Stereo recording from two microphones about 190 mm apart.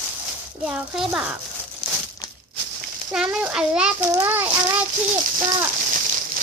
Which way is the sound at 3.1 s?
5° right (ahead or behind).